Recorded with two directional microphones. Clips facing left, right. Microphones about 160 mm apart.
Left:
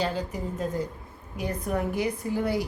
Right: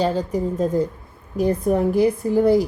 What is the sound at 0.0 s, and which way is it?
Speech, 45° right (ahead or behind).